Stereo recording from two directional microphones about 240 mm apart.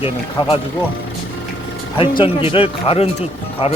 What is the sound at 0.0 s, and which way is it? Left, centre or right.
Speech, left.